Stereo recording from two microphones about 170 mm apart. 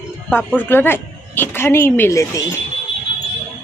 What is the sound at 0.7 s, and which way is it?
Speech, 15° left (ahead or behind).